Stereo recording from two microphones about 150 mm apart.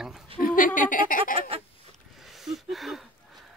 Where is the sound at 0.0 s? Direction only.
Centre (ahead or behind).